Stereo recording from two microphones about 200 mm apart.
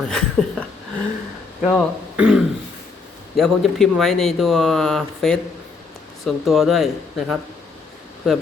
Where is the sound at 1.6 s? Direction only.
5° right (ahead or behind).